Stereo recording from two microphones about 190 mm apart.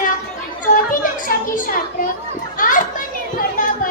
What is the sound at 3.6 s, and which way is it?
Chatter, 45° left (ahead or behind).